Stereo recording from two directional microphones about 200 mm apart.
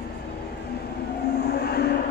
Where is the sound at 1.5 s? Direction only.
50° left (ahead or behind).